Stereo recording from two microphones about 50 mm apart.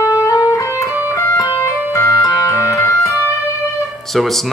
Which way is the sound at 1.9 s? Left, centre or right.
Left.